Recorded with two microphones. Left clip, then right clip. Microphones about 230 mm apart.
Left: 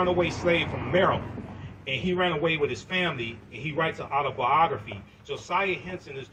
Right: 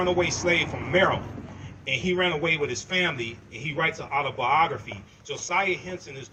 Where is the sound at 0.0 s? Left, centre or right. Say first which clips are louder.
Even; right.